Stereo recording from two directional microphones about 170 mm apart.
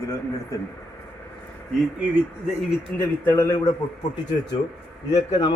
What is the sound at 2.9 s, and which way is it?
Speech, 15° left (ahead or behind).